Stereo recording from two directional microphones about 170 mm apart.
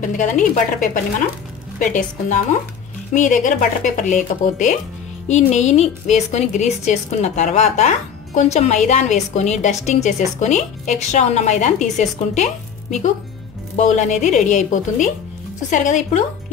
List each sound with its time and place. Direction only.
0.0 s a woman's voice: 45° left (ahead or behind)
13.7 s a woman's voice: 45° left (ahead or behind)